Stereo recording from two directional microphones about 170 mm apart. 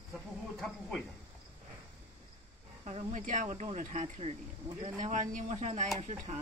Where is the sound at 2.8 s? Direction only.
45° right (ahead or behind).